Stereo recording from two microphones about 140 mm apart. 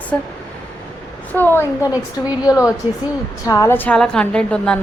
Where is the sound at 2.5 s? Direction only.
20° left (ahead or behind).